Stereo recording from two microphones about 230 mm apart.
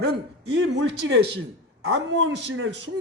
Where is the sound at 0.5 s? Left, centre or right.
Right.